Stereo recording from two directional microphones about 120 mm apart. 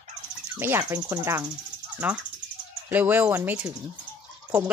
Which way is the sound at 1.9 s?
15° right (ahead or behind).